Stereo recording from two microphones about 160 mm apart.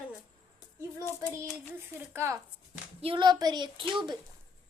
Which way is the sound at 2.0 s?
15° right (ahead or behind).